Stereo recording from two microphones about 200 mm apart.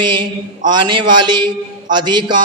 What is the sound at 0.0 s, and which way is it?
A man's voice, 25° right (ahead or behind).